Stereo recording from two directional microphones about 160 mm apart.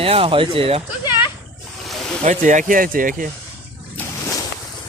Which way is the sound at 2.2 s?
50° right (ahead or behind).